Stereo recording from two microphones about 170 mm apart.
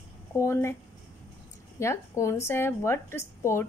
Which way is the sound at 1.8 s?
15° left (ahead or behind).